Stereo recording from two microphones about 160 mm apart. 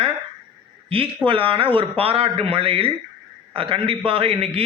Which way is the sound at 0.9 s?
35° right (ahead or behind).